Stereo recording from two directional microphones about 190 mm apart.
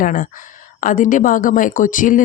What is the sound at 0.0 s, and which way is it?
Speech, 45° left (ahead or behind).